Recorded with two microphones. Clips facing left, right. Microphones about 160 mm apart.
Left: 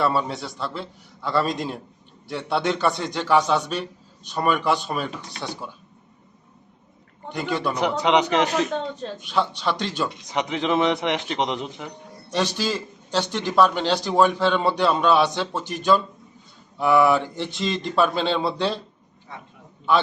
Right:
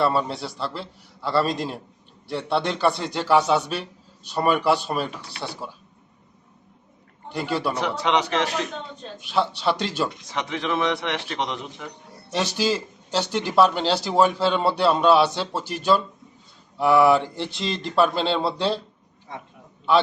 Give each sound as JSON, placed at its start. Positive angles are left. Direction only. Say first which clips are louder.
{"t": 0.0, "sound": "a man's voice", "louder": "right 1 dB", "side_deg": 0}
{"t": 7.7, "sound": "a man's voice", "louder": "left 4 dB", "side_deg": 15}
{"t": 9.2, "sound": "speech", "louder": "right 2 dB", "side_deg": -5}
{"t": 10.2, "sound": "a man's voice", "louder": "left 3 dB", "side_deg": 20}
{"t": 12.3, "sound": "a man's voice", "louder": "right 1 dB", "side_deg": -10}